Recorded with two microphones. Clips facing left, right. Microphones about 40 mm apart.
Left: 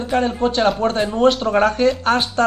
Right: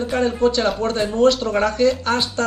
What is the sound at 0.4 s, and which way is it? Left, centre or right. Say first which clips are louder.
A man's voice: left 1 dB; left.